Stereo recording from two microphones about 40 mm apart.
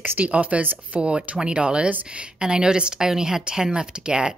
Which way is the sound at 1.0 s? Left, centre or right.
Right.